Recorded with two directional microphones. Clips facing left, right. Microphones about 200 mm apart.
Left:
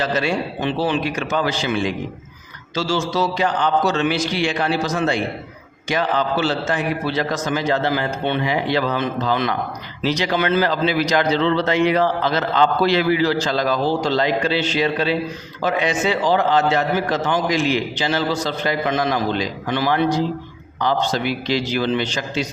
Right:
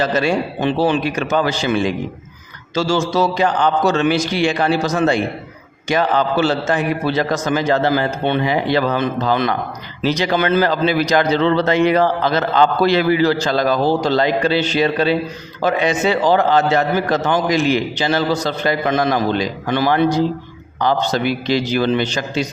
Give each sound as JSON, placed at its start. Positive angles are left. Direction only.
{"t": 0.0, "sound": "a man's voice", "side_deg": -45}